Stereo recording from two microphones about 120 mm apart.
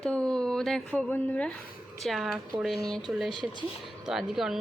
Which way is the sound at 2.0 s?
Centre (ahead or behind).